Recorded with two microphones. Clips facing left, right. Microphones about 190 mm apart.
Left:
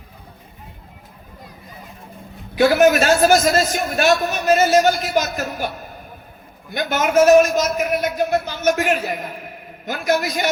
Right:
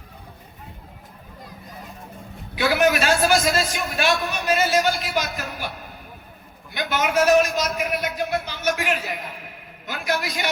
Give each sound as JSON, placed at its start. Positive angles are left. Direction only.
{"t": 2.6, "sound": "a man's voice", "side_deg": 45}